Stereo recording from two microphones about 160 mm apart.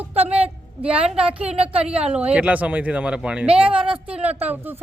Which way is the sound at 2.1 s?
5° right (ahead or behind).